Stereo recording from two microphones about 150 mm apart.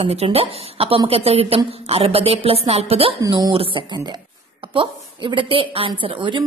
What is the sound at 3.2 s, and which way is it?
A woman's voice, 30° right (ahead or behind).